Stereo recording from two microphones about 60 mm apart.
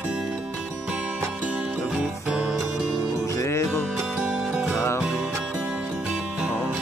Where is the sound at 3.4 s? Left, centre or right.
Left.